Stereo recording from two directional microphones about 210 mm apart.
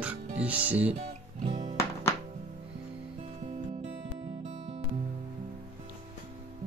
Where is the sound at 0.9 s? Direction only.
30° right (ahead or behind).